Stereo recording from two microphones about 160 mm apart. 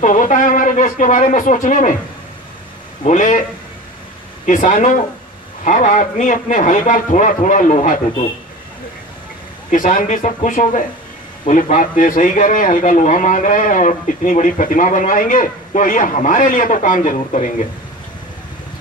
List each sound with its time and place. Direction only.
0.0 s speech: 50° left (ahead or behind)
3.0 s speech: 50° left (ahead or behind)
4.5 s speech: 55° left (ahead or behind)
9.7 s speech: 55° left (ahead or behind)